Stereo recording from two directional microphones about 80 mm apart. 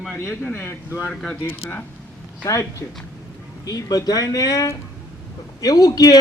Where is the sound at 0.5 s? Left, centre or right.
Left.